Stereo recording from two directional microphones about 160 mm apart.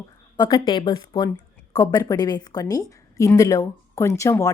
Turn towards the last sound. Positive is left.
turn(degrees=15)  # may be behind; listen again after turning